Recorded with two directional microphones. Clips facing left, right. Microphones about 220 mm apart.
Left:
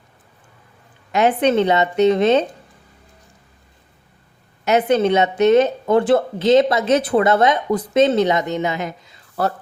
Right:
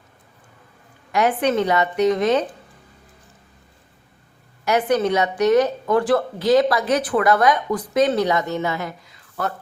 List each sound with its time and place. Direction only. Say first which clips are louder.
1.1 s speech: left 3 dB; 20° left (ahead or behind)
4.6 s speech: left 3 dB; 20° left (ahead or behind)